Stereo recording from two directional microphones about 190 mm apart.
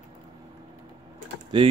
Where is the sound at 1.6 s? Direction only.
25° right (ahead or behind).